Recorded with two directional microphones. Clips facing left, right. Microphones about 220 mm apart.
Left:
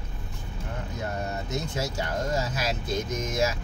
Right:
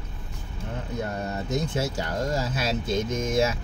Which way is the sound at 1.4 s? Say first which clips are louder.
Right 4 dB; 30° right (ahead or behind).